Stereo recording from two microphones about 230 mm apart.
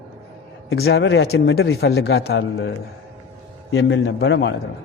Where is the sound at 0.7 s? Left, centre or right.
Left.